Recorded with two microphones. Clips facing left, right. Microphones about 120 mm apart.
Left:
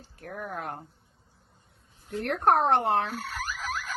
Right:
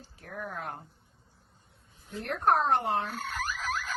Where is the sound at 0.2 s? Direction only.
50° left (ahead or behind).